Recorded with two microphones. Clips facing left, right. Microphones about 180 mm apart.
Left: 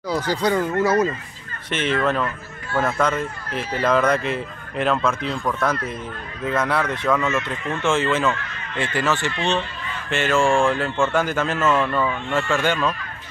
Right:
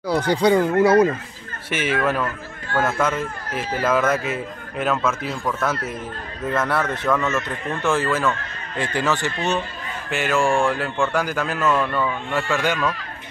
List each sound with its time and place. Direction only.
0.4 s speech: 15° right (ahead or behind)
0.7 s speech: 30° right (ahead or behind)
1.7 s speech: 10° right (ahead or behind)
7.8 s speech: 20° left (ahead or behind)
8.4 s speech: 40° right (ahead or behind)
8.9 s speech: 15° right (ahead or behind)